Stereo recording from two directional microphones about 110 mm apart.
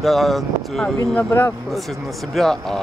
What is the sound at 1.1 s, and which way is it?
Speech, 20° left (ahead or behind).